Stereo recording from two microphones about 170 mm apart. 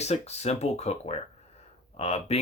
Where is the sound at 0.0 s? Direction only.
40° left (ahead or behind).